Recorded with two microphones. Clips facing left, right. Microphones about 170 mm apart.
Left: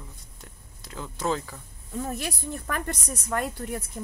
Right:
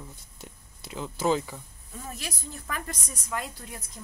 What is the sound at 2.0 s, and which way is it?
Speech, 60° left (ahead or behind).